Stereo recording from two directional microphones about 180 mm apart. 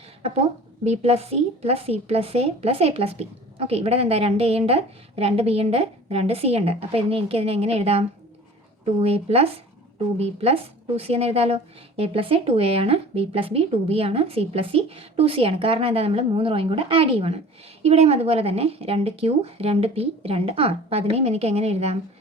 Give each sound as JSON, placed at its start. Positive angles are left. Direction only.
{"t": 0.9, "sound": "a woman's voice", "side_deg": -35}